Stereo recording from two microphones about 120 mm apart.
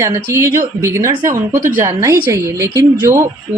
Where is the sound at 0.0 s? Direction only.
25° right (ahead or behind).